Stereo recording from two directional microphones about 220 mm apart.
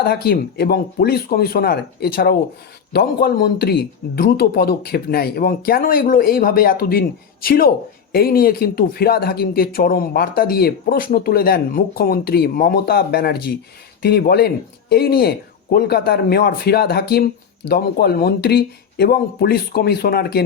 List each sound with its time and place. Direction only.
0.0 s a woman's voice: 45° left (ahead or behind)